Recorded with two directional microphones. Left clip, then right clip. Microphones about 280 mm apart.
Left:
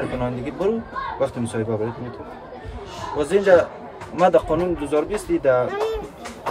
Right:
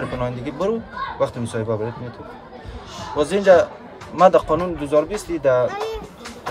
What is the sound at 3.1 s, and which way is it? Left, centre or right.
A man's voice, centre.